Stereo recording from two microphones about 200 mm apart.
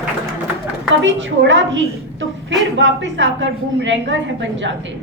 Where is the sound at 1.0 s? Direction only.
65° right (ahead or behind).